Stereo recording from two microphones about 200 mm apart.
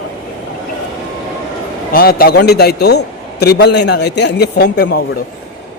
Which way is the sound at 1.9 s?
45° left (ahead or behind).